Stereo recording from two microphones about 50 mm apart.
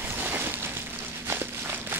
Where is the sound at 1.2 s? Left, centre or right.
Right.